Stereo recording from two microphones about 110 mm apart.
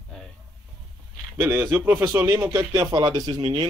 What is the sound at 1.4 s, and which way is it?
Speech, 20° right (ahead or behind).